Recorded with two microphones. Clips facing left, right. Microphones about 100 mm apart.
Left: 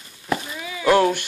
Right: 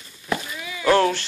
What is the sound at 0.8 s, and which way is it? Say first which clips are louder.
Speech: left 1 dB; 15° left (ahead or behind).